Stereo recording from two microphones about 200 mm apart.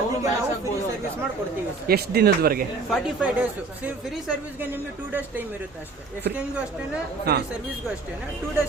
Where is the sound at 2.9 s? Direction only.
5° right (ahead or behind).